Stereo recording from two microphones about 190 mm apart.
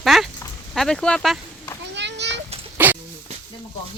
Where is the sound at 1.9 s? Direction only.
65° right (ahead or behind).